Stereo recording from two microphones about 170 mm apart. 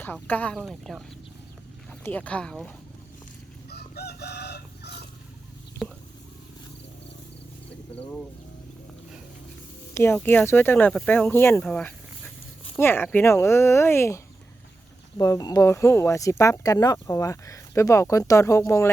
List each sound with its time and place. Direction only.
0.0 s speech: 10° left (ahead or behind)
3.7 s chicken: 70° left (ahead or behind)
9.9 s speech: 15° left (ahead or behind)
15.2 s speech: 25° left (ahead or behind)